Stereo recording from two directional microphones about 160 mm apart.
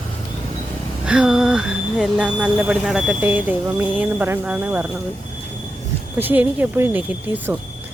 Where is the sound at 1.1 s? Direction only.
5° right (ahead or behind).